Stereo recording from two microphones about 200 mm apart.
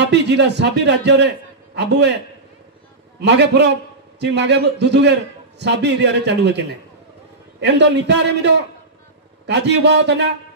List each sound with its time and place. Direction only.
0.0 s a man's voice: 60° right (ahead or behind)
3.2 s a man's voice: 60° right (ahead or behind)
7.6 s a man's voice: 60° right (ahead or behind)